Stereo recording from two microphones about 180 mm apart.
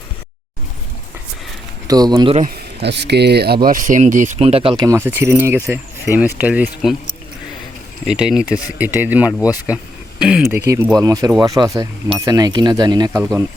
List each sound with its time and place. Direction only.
1.9 s speech: 20° right (ahead or behind)
2.5 s speech: 70° right (ahead or behind); by 4.7 s 35° right (ahead or behind)
4.8 s speech: 15° right (ahead or behind)
8.0 s speech: 5° right (ahead or behind)
10.9 s speech: 20° right (ahead or behind)